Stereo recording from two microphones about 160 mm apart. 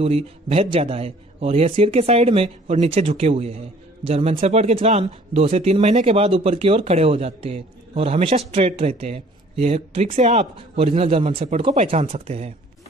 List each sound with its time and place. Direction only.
0.0 s a man's voice: 40° right (ahead or behind)